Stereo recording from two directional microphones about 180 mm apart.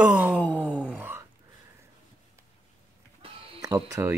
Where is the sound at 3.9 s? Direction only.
15° right (ahead or behind).